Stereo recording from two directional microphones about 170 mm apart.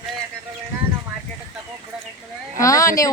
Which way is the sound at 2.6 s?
20° left (ahead or behind).